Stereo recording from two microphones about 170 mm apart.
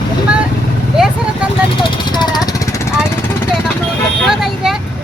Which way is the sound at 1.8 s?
25° left (ahead or behind).